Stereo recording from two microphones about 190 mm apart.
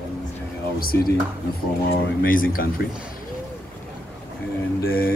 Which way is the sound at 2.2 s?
45° left (ahead or behind).